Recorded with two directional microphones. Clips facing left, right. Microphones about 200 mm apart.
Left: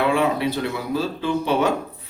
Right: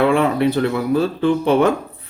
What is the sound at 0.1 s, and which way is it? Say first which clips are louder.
Speech: right 4 dB; 55° right (ahead or behind).